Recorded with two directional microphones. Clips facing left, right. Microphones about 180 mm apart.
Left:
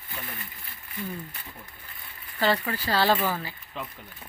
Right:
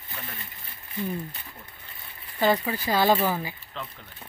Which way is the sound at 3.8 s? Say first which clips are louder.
Left 1 dB; 10° left (ahead or behind).